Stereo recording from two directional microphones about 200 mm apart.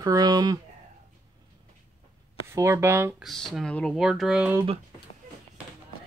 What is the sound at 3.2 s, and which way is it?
Speech, centre (ahead or behind).